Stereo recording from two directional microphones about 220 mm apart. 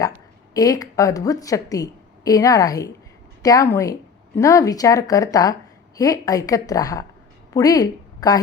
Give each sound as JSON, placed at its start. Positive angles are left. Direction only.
{"t": 0.0, "sound": "a woman's voice", "side_deg": 15}